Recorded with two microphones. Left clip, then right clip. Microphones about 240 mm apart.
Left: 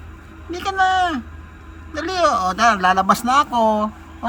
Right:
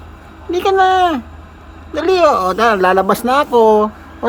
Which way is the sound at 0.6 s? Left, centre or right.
Centre.